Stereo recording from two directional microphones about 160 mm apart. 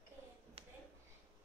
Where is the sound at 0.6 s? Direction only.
35° right (ahead or behind).